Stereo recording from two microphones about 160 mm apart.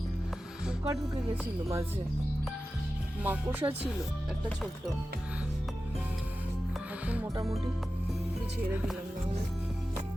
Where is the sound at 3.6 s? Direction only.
25° right (ahead or behind).